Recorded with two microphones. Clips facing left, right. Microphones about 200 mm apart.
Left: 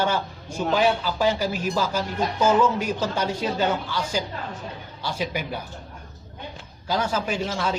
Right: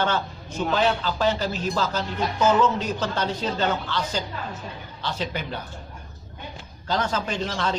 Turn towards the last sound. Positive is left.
turn(degrees=10)  # may be behind; listen again after turning